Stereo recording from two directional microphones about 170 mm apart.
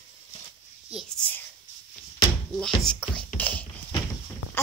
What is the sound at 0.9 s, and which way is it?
Whispering, centre (ahead or behind).